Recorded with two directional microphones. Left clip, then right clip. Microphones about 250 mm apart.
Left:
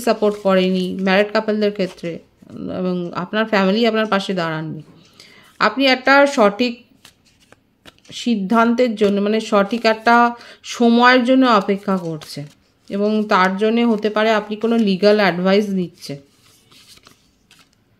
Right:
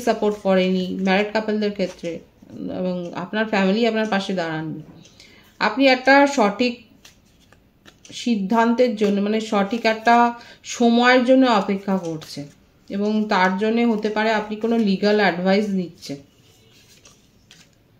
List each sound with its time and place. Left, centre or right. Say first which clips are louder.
0.0 s speech: left 4 dB; left
7.8 s speech: left 3 dB; left